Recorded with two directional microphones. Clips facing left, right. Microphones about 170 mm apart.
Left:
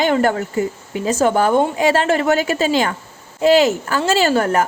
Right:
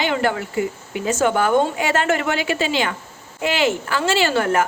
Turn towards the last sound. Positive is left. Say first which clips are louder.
# left 3 dB
turn(degrees=40)  # may be behind; listen again after turning